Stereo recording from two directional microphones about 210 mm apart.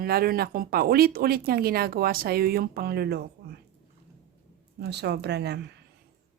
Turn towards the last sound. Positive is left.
turn(degrees=-50)  # may be behind; listen again after turning